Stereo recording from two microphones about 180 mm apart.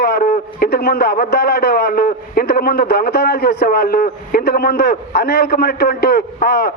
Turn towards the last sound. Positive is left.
turn(degrees=60)  # may be behind; listen again after turning